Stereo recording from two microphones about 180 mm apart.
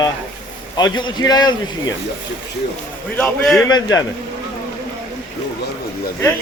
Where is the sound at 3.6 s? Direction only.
20° left (ahead or behind).